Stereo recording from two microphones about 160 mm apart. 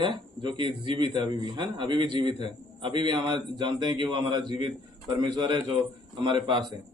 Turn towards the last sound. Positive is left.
turn(degrees=-30)  # may be behind; listen again after turning